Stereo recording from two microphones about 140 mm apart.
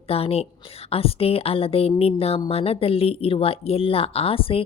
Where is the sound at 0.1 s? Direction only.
45° left (ahead or behind).